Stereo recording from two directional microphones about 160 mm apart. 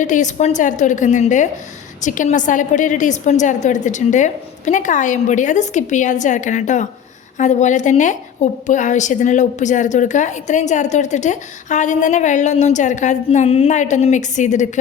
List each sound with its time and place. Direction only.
0.0 s a woman's voice: 50° left (ahead or behind)